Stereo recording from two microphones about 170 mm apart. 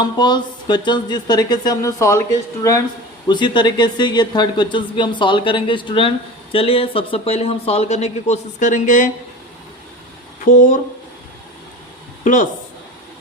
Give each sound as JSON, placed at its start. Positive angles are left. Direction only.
{"t": 0.0, "sound": "speech", "side_deg": 25}
{"t": 10.4, "sound": "speech", "side_deg": 50}
{"t": 12.2, "sound": "speech", "side_deg": 50}